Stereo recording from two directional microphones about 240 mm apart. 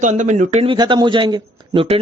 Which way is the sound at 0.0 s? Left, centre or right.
Right.